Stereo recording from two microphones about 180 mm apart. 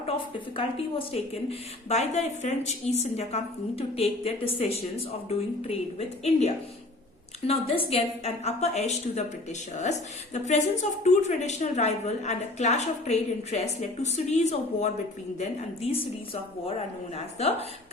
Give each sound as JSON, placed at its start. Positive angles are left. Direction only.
{"t": 0.5, "sound": "a woman's voice", "side_deg": 30}